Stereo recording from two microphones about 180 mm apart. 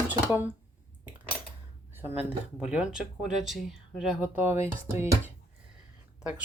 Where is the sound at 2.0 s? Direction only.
10° right (ahead or behind).